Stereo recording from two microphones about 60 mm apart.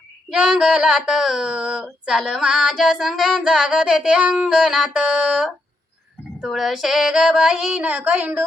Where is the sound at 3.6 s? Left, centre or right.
Centre.